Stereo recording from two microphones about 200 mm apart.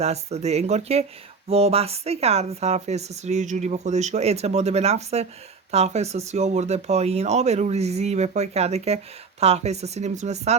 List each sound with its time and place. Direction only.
0.0 s speech: 30° right (ahead or behind)